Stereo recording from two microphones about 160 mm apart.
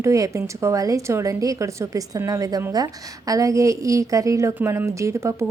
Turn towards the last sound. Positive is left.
turn(degrees=-20)  # may be behind; listen again after turning